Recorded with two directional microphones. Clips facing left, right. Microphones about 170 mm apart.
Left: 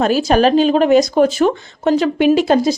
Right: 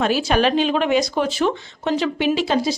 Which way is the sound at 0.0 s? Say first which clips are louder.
Left 5 dB; 40° left (ahead or behind).